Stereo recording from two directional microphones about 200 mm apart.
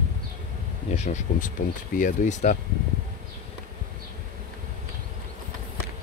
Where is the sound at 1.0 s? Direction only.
35° left (ahead or behind).